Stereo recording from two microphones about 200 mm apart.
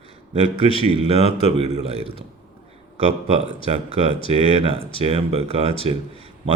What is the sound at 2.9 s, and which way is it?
A man's voice, 35° right (ahead or behind).